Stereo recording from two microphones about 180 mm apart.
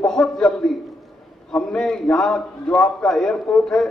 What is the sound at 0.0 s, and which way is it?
A man's voice, centre (ahead or behind).